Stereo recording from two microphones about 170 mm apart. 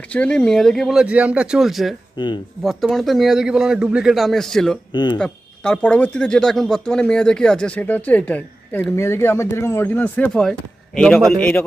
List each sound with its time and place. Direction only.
0.0 s speech: 5° left (ahead or behind)
2.1 s speech: 25° left (ahead or behind)
2.6 s speech: centre (ahead or behind)
4.9 s speech: 25° left (ahead or behind)
5.2 s speech: 5° left (ahead or behind)